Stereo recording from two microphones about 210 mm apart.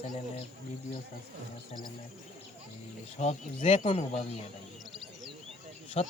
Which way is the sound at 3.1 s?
30° left (ahead or behind).